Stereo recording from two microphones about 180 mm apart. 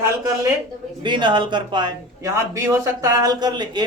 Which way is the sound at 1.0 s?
25° right (ahead or behind).